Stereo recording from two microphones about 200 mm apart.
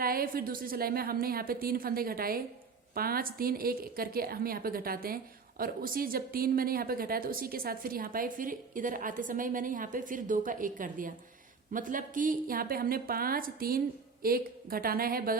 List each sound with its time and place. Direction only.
0.0 s a woman's voice: 45° right (ahead or behind)